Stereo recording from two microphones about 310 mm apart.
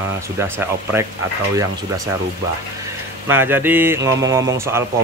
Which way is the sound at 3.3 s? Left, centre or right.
Centre.